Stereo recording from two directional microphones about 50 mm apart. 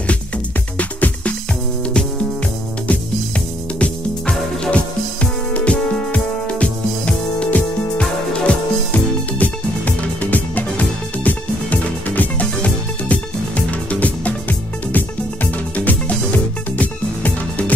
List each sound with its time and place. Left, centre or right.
0.7 s music: left
2.9 s music: left
8.9 s music: left